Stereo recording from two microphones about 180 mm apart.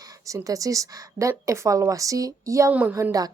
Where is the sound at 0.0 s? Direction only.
20° right (ahead or behind).